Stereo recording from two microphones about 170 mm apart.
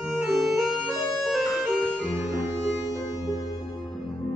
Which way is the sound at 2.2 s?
25° left (ahead or behind).